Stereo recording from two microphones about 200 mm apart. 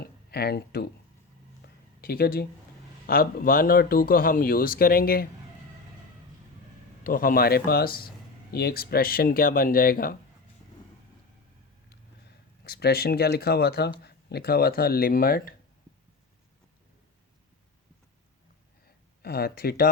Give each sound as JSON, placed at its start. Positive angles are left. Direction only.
{"t": 0.0, "sound": "a sound", "side_deg": 50}
{"t": 3.1, "sound": "speech", "side_deg": 45}
{"t": 7.0, "sound": "speech", "side_deg": 45}
{"t": 12.6, "sound": "speech", "side_deg": 50}
{"t": 19.2, "sound": "speech", "side_deg": 50}